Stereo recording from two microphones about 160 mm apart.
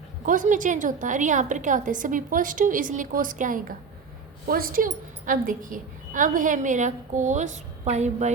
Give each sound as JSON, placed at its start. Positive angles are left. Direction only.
{"t": 0.3, "sound": "a woman's voice", "side_deg": -55}